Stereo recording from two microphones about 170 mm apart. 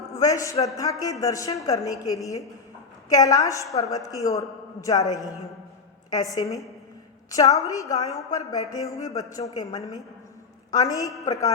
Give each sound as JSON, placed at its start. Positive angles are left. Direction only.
{"t": 0.2, "sound": "a woman's voice", "side_deg": 20}